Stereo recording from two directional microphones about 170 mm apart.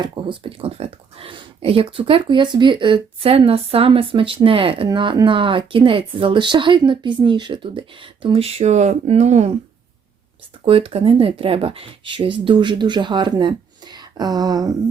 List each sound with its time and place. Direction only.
0.0 s speech: 30° right (ahead or behind)
10.7 s speech: 35° right (ahead or behind)